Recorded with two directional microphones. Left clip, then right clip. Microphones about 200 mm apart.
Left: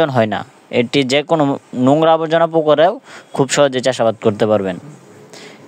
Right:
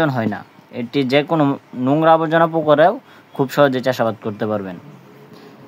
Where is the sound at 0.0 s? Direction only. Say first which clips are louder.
Left 5 dB; 45° left (ahead or behind).